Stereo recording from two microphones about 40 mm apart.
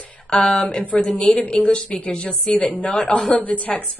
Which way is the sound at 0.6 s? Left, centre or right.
Centre.